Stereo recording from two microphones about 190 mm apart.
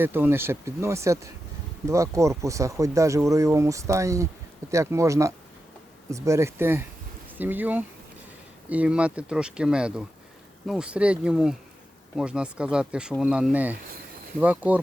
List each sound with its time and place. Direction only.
0.0 s speech: 10° right (ahead or behind)